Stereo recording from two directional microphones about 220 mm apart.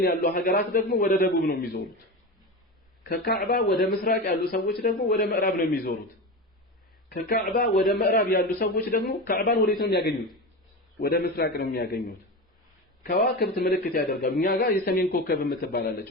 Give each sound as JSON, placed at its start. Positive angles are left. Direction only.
{"t": 0.0, "sound": "a man's voice", "side_deg": 40}
{"t": 3.0, "sound": "a man's voice", "side_deg": 45}
{"t": 7.1, "sound": "a man's voice", "side_deg": 45}